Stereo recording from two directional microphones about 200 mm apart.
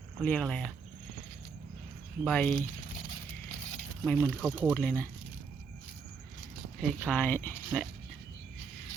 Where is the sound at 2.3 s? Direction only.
5° left (ahead or behind).